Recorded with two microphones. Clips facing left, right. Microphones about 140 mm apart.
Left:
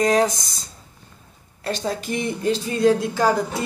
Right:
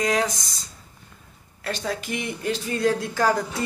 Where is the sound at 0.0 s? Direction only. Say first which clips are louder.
Left 5 dB; 35° left (ahead or behind).